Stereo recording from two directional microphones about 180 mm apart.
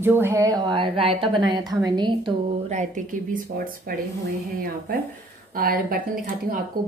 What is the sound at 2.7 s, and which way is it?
A woman's voice, 45° right (ahead or behind).